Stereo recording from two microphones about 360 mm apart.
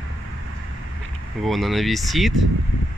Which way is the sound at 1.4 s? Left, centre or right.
Centre.